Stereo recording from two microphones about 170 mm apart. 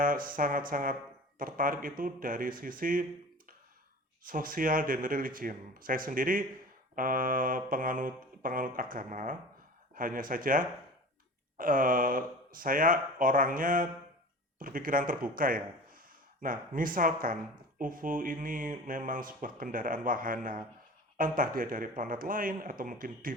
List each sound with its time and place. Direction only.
0.3 s speech: 55° right (ahead or behind)
4.3 s speech: 55° right (ahead or behind)